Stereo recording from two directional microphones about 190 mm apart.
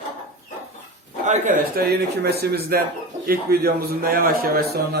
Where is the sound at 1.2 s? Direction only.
40° right (ahead or behind).